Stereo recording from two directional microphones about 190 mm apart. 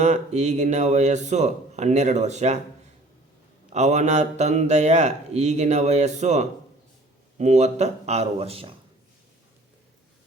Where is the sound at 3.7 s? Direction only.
35° right (ahead or behind).